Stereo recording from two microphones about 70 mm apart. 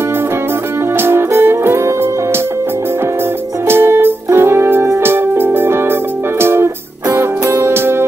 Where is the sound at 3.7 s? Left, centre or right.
Right.